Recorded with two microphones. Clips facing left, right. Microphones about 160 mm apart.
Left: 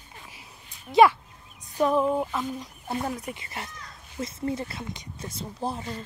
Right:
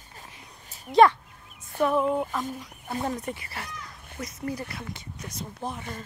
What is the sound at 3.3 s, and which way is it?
Speech, 25° left (ahead or behind).